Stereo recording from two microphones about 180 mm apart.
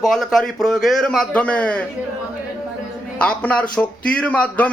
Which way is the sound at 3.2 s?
5° left (ahead or behind).